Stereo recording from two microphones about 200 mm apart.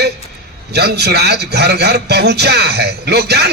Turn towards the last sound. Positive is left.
turn(degrees=-55)  # may be behind; listen again after turning